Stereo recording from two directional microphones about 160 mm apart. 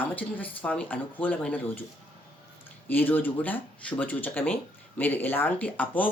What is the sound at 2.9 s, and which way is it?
Speech, 10° left (ahead or behind).